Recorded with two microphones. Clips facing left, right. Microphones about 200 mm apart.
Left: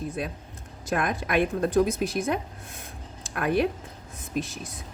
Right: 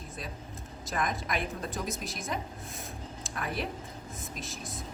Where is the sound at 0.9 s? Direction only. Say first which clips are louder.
Left 6 dB; 65° left (ahead or behind).